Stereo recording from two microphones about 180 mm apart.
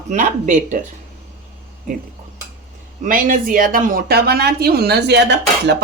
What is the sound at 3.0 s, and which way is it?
Speech, 45° right (ahead or behind).